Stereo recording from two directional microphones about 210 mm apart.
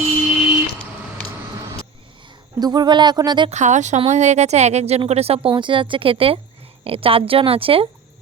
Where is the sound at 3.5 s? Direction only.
35° right (ahead or behind).